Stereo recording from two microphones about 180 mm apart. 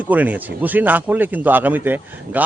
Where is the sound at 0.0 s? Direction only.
10° right (ahead or behind).